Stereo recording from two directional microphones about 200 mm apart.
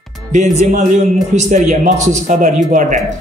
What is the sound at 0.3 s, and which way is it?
Speech, 35° right (ahead or behind).